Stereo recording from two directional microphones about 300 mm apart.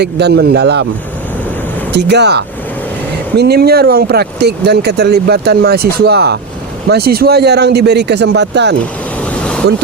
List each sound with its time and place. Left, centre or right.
0.0 s speech: right
1.9 s speech: right
9.3 s vehicle: centre